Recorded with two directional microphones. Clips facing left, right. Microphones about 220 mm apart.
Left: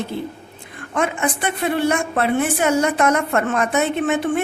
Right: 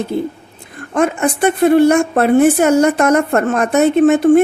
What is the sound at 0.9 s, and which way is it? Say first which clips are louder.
A woman's voice: right 6 dB; 40° right (ahead or behind).